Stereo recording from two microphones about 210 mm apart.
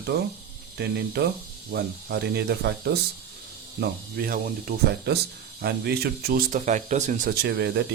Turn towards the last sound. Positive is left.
turn(degrees=-50)  # may be behind; listen again after turning